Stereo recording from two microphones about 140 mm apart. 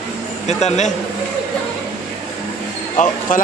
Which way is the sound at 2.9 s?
60° left (ahead or behind).